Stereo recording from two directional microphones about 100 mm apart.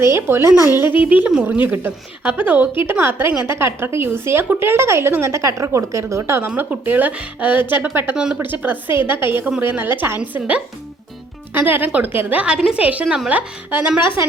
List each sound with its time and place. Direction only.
0.0 s a woman's voice: 25° right (ahead or behind)
1.3 s a woman's voice: 10° right (ahead or behind)
8.1 s a woman's voice: 10° right (ahead or behind)